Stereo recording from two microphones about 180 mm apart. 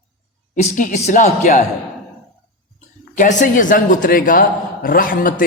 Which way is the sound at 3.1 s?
45° left (ahead or behind).